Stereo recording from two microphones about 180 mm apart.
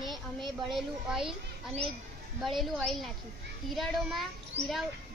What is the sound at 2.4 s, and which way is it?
A child's voice, centre (ahead or behind).